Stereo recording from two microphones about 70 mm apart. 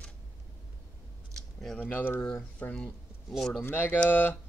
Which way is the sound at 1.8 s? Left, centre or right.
Left.